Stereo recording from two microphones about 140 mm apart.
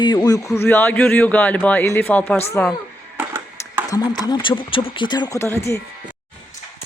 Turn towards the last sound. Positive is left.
turn(degrees=20)  # may be behind; listen again after turning